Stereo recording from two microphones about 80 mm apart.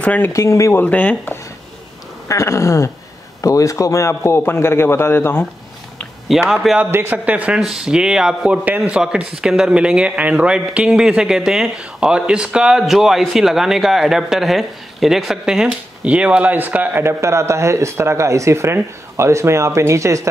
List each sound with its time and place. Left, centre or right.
0.0 s speech: centre
0.3 s a man's voice: left
0.7 s speech: left
2.2 s a man's voice: left
6.5 s a man's voice: centre
6.9 s a man's voice: right; by 8.5 s centre
8.6 s a man's voice: centre
17.2 s speech: right